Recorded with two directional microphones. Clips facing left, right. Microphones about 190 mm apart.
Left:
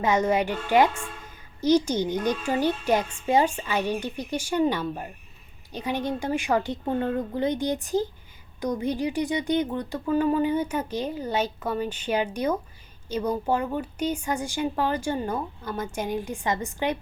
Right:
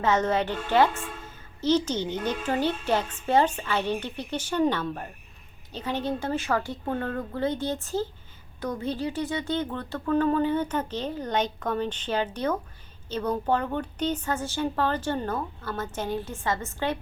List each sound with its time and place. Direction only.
0.0 s a woman's voice: 10° left (ahead or behind)